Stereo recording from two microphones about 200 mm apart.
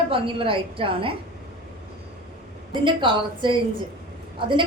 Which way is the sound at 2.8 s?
25° right (ahead or behind).